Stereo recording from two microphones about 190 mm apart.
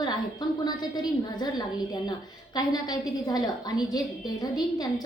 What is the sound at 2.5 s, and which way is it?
A woman's voice, 20° left (ahead or behind).